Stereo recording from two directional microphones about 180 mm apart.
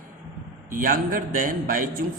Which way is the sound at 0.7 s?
50° right (ahead or behind).